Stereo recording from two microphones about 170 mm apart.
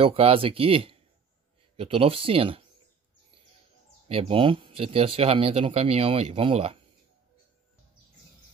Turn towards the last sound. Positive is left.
turn(degrees=-35)  # may be behind; listen again after turning